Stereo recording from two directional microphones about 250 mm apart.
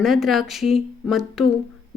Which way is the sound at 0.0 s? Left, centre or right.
Centre.